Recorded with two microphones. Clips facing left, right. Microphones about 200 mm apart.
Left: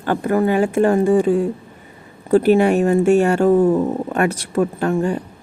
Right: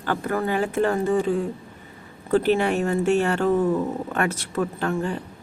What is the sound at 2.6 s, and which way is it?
Speech, 15° left (ahead or behind).